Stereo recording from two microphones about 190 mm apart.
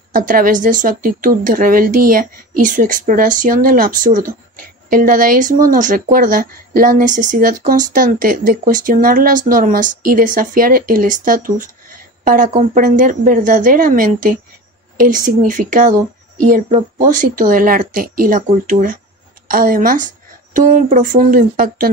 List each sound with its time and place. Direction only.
0.1 s speech: 45° right (ahead or behind)